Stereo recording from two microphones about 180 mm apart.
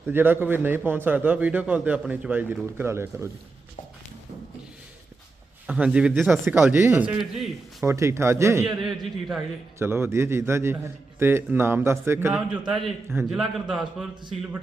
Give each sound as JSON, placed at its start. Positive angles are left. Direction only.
{"t": 0.0, "sound": "a man's voice", "side_deg": -10}
{"t": 5.6, "sound": "a man's voice", "side_deg": -5}
{"t": 7.1, "sound": "a man's voice", "side_deg": 0}
{"t": 7.9, "sound": "a man's voice", "side_deg": -15}
{"t": 8.6, "sound": "a man's voice", "side_deg": 0}
{"t": 9.7, "sound": "a man's voice", "side_deg": -15}
{"t": 12.3, "sound": "a man's voice", "side_deg": -5}